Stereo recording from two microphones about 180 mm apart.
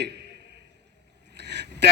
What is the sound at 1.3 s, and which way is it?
Vehicle, 70° right (ahead or behind).